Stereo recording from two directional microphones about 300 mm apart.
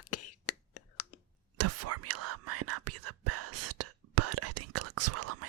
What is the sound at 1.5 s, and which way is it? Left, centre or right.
Whispering, right.